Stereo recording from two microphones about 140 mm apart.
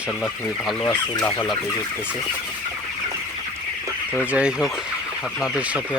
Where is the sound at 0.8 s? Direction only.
15° left (ahead or behind).